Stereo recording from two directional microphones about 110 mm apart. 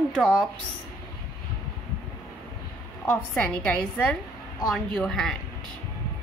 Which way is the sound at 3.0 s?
15° left (ahead or behind).